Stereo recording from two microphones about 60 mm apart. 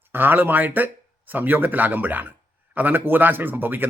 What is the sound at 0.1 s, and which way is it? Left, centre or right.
A man's voice, right.